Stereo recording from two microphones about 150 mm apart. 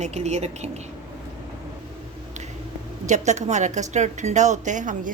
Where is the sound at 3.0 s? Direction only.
50° right (ahead or behind).